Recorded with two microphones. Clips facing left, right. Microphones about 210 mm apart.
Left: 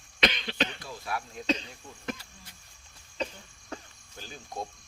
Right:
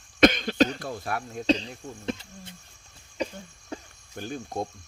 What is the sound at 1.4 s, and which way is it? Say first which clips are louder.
Speech: right 7 dB; 30° right (ahead or behind).